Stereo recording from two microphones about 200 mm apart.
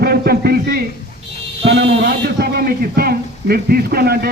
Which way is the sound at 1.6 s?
60° right (ahead or behind).